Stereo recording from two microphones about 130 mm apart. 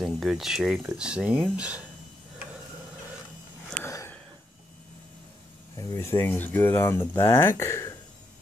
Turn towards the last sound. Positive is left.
turn(degrees=20)  # may be behind; listen again after turning